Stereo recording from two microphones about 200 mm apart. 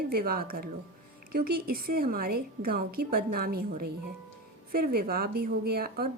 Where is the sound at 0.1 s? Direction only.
50° right (ahead or behind).